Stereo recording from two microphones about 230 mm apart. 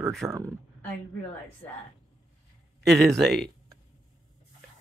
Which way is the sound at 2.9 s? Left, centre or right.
Centre.